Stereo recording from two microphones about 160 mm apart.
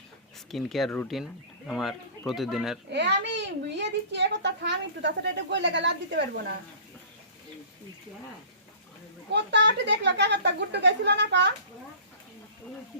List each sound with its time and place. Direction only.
0.5 s speech: centre (ahead or behind)
2.9 s a child's voice: 90° right
9.3 s a child's voice: 90° right